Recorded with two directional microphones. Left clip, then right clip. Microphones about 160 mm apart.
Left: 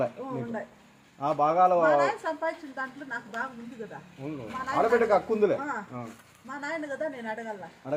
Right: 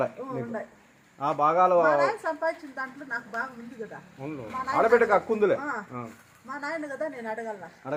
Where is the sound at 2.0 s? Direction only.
5° left (ahead or behind).